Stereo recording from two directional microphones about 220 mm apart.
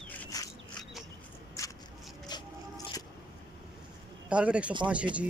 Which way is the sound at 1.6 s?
15° left (ahead or behind).